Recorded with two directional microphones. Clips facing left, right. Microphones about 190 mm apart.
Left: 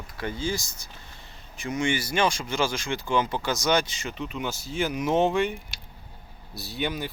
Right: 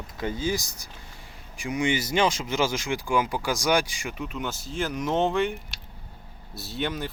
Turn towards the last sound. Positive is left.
turn(degrees=0)  # may be behind; listen again after turning